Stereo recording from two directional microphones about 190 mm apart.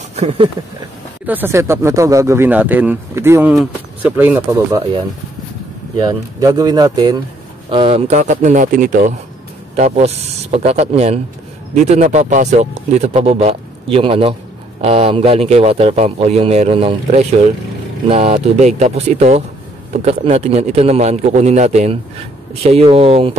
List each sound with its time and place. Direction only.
0.1 s a sound: 30° right (ahead or behind)
1.2 s speech: 10° right (ahead or behind)
5.9 s a man's voice: 20° right (ahead or behind)